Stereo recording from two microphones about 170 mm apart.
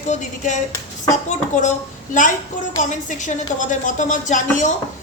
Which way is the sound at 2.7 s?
45° left (ahead or behind).